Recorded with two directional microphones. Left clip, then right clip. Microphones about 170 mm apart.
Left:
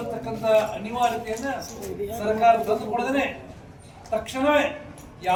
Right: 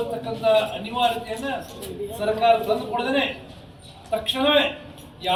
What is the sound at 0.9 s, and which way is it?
A man's voice, 10° right (ahead or behind).